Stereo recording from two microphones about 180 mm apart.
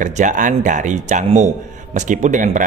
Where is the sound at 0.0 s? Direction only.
45° right (ahead or behind).